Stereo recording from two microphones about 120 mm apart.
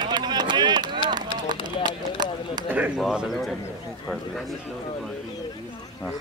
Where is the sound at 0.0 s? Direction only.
35° right (ahead or behind).